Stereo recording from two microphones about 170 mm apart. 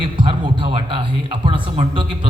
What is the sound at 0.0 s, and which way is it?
A man's voice, 30° right (ahead or behind).